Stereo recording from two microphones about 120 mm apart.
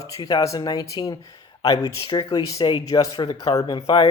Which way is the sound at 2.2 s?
40° left (ahead or behind).